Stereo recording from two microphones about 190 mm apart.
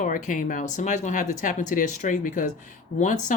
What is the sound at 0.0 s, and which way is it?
Speech, 45° left (ahead or behind).